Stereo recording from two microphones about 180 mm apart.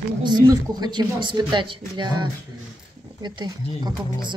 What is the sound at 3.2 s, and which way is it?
Speech, 25° right (ahead or behind).